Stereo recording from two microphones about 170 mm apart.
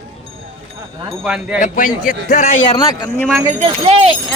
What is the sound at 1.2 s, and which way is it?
Speech, 5° right (ahead or behind).